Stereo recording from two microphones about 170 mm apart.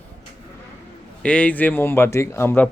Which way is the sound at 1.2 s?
5° left (ahead or behind).